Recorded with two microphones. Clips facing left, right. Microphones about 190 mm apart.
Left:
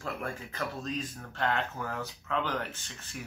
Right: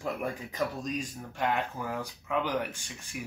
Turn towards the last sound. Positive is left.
turn(degrees=-10)  # may be behind; listen again after turning